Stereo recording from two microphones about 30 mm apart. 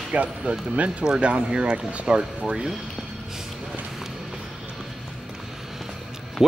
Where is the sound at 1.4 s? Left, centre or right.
Right.